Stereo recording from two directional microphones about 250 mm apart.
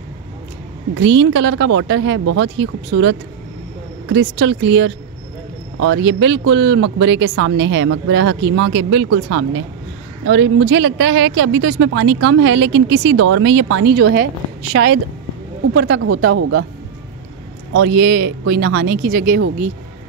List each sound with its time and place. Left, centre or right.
0.9 s speech: right
14.7 s speech: right
17.7 s speech: right